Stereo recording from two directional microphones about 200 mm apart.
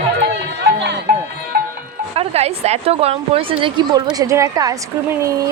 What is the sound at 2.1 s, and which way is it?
A woman's voice, 30° right (ahead or behind).